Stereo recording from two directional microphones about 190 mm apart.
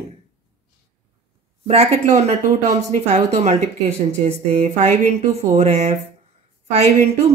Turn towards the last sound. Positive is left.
turn(degrees=-35)  # may be behind; listen again after turning